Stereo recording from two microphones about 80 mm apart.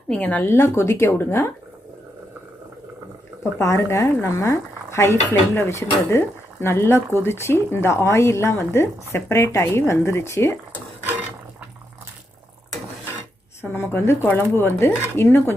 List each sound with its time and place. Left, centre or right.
0.1 s speech: centre
0.4 s speech: left
3.6 s speech: left
13.6 s speech: left